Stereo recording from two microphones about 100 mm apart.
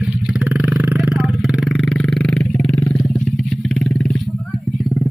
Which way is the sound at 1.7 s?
10° left (ahead or behind).